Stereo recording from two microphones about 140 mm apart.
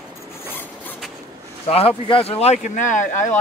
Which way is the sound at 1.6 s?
45° left (ahead or behind).